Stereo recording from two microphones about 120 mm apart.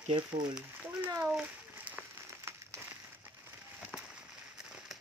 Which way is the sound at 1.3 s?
10° right (ahead or behind).